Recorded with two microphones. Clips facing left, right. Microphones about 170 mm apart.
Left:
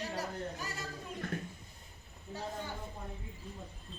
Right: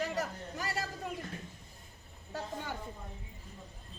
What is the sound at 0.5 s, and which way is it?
Speech, 90° right.